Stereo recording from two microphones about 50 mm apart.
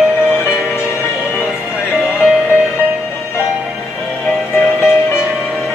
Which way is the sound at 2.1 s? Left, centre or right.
Centre.